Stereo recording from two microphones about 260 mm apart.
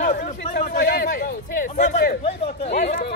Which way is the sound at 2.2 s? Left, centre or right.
Left.